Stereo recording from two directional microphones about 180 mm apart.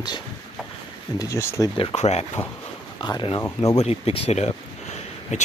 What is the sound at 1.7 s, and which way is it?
Speech, 35° left (ahead or behind).